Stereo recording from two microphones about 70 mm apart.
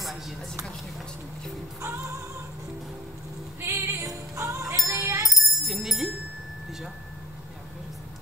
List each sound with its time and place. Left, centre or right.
1.8 s music: right
3.6 s music: right
4.9 s a sound: right
5.3 s jingle bell: centre